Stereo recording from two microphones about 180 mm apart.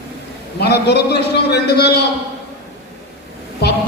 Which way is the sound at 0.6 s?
65° left (ahead or behind).